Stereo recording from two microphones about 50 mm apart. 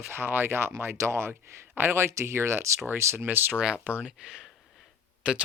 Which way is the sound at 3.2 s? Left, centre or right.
Right.